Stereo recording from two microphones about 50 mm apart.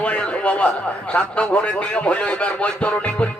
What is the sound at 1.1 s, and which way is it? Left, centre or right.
Music, left.